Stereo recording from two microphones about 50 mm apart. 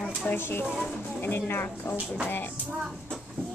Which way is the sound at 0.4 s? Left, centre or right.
Left.